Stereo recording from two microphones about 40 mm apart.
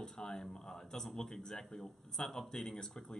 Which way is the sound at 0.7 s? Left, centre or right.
Centre.